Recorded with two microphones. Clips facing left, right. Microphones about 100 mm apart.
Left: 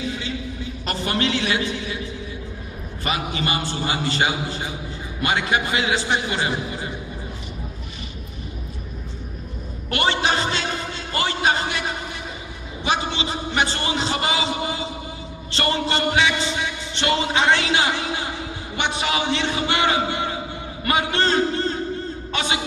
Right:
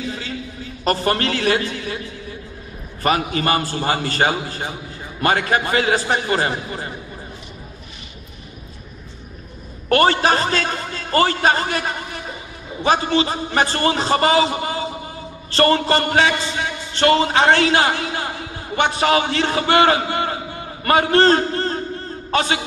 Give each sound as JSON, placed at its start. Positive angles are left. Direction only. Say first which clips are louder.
{"t": 0.8, "sound": "a man's voice", "louder": "right 5 dB", "side_deg": -40}
{"t": 3.0, "sound": "a man's voice", "louder": "right 6 dB", "side_deg": -45}
{"t": 9.8, "sound": "a man's voice", "louder": "right 6 dB", "side_deg": -40}
{"t": 12.8, "sound": "a man's voice", "louder": "right 6 dB", "side_deg": -40}